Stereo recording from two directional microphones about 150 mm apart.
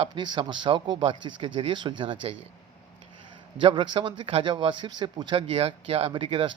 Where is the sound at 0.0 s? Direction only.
30° right (ahead or behind).